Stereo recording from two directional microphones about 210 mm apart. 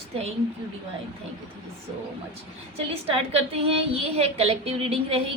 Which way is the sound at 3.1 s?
30° right (ahead or behind).